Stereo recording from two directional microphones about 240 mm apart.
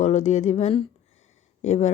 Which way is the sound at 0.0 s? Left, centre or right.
Left.